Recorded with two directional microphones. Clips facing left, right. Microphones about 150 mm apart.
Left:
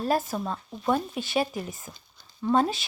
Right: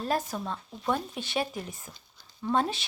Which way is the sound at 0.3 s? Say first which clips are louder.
Left 4 dB; 15° left (ahead or behind).